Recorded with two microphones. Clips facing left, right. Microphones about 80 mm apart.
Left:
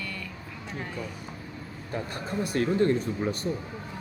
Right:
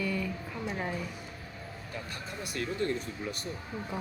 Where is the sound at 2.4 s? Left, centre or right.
Left.